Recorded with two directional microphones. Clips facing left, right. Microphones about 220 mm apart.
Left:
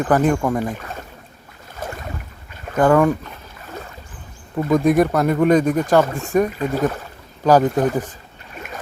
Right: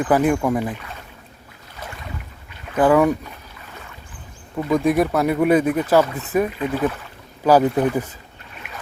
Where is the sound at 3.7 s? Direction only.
40° left (ahead or behind).